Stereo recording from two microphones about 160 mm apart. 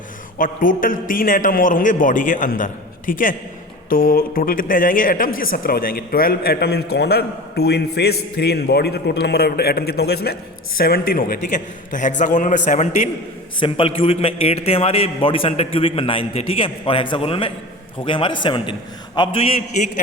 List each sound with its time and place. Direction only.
0.3 s a man's voice: 60° left (ahead or behind); by 10.3 s 85° left
10.8 s a woman's voice: 65° left (ahead or behind)
11.9 s a man's voice: 50° left (ahead or behind)
13.6 s a man's voice: 35° left (ahead or behind)